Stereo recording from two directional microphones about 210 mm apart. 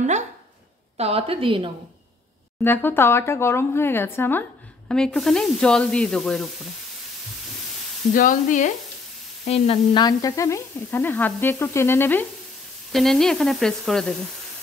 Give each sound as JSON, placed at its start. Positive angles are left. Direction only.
{"t": 0.9, "sound": "a woman's voice", "side_deg": -30}
{"t": 2.6, "sound": "speech", "side_deg": 10}
{"t": 8.1, "sound": "speech", "side_deg": 40}
{"t": 9.5, "sound": "sizzle", "side_deg": 30}
{"t": 10.0, "sound": "speech", "side_deg": 15}
{"t": 12.9, "sound": "sizzle", "side_deg": 0}